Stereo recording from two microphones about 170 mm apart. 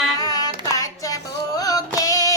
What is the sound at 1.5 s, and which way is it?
Music, 20° left (ahead or behind).